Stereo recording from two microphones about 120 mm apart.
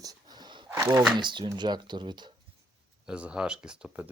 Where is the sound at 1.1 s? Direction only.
40° right (ahead or behind).